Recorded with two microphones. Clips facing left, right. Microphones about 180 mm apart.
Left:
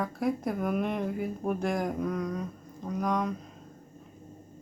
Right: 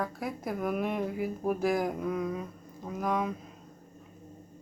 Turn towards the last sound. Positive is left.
turn(degrees=-5)  # may be behind; listen again after turning